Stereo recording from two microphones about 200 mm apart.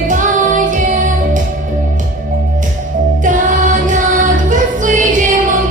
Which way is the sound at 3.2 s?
40° right (ahead or behind).